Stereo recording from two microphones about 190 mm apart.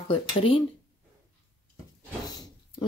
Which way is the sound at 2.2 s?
20° left (ahead or behind).